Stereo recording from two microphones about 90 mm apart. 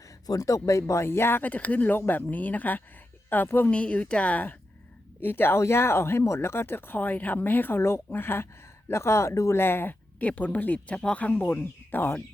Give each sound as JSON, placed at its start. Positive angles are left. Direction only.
{"t": 0.3, "sound": "a woman's voice", "side_deg": 40}
{"t": 3.7, "sound": "a woman's voice", "side_deg": 15}